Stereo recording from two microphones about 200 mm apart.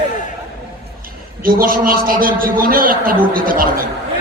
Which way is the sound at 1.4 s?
45° right (ahead or behind).